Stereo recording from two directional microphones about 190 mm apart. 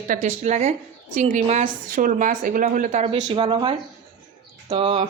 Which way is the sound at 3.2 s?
25° right (ahead or behind).